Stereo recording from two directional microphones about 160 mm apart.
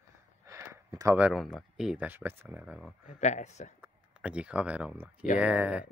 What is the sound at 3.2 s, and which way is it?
Speech, 45° left (ahead or behind).